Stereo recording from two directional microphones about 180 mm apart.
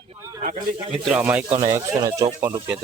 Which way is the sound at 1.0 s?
10° right (ahead or behind).